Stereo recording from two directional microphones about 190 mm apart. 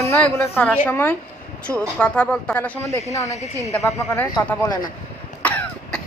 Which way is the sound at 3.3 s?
35° left (ahead or behind).